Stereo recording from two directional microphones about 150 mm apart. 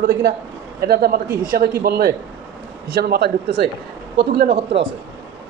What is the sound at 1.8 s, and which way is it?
Speech, 90° right.